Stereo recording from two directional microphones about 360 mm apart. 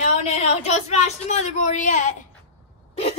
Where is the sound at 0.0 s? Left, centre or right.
Centre.